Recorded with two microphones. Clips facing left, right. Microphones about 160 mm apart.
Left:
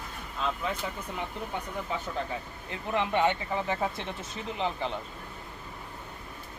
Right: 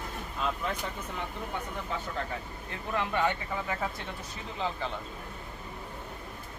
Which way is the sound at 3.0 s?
20° left (ahead or behind).